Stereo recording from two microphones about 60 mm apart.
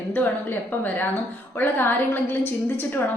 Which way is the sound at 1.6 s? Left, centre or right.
Left.